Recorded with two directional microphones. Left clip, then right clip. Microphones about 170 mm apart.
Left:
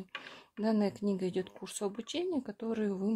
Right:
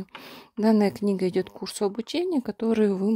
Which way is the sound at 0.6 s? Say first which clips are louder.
Right 10 dB; 60° right (ahead or behind).